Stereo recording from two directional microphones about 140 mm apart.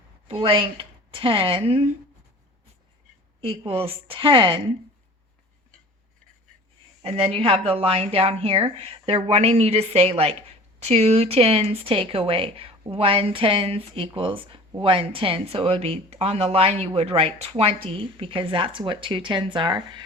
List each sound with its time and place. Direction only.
0.3 s speech: 40° right (ahead or behind)
3.4 s speech: 40° right (ahead or behind)
7.0 s speech: 45° right (ahead or behind)